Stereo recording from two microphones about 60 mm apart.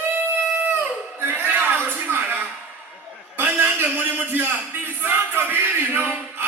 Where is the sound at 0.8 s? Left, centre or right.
Right.